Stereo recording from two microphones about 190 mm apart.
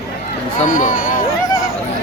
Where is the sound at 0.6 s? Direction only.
45° left (ahead or behind).